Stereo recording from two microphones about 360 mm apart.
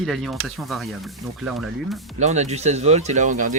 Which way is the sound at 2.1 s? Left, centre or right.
Centre.